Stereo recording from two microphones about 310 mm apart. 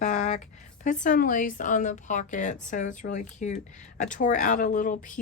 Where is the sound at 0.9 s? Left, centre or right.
Left.